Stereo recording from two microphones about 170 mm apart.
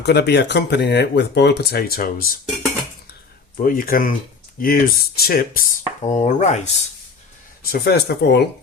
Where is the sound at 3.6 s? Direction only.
55° left (ahead or behind).